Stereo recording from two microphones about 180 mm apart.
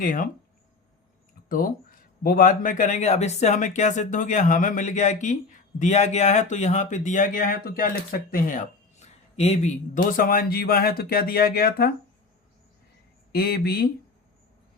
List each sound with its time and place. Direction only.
0.0 s speech: 50° left (ahead or behind)
1.5 s speech: 50° left (ahead or behind)
13.3 s speech: 60° left (ahead or behind)